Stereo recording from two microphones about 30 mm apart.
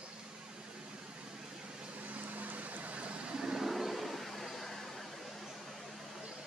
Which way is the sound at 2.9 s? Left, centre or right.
Right.